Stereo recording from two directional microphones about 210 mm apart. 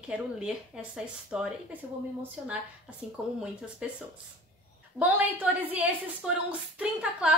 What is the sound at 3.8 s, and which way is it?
A woman's voice, 5° right (ahead or behind).